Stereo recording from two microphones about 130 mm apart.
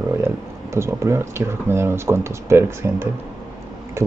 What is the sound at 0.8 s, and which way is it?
Speech, 20° right (ahead or behind).